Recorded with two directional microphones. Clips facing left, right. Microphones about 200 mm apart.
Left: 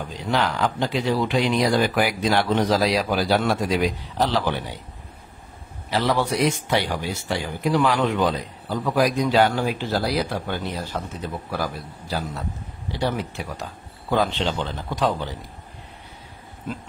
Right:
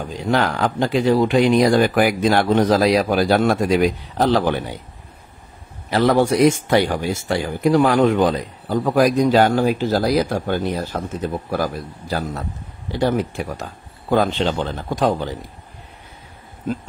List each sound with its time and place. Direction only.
0.3 s speech: 50° right (ahead or behind)
5.9 s speech: 50° right (ahead or behind)